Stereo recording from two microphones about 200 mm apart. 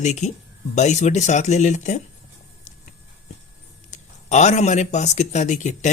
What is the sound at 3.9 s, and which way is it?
A man's voice, 35° left (ahead or behind).